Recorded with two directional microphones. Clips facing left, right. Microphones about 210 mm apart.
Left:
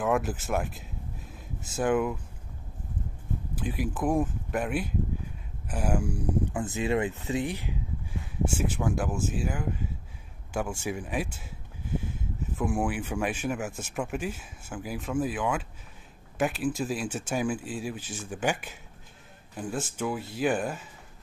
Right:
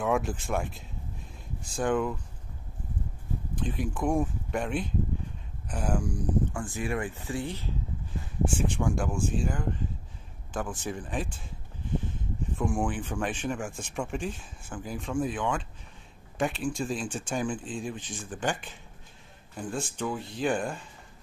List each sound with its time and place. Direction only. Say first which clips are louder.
0.0 s speech: left 1 dB; centre (ahead or behind)
3.5 s speech: even; 5° left (ahead or behind)
6.5 s speech: left 4 dB; 20° left (ahead or behind)
8.5 s speech: even; 5° left (ahead or behind)